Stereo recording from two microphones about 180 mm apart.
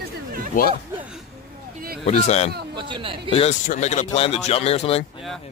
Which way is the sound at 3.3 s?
40° left (ahead or behind).